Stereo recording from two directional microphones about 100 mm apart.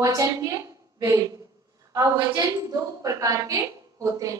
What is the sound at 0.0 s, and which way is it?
A woman's voice, 35° right (ahead or behind).